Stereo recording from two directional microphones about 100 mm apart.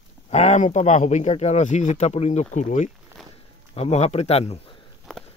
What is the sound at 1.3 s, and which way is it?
Speech, 90° left.